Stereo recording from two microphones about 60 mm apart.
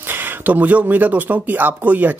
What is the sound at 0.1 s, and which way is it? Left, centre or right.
Speech, right.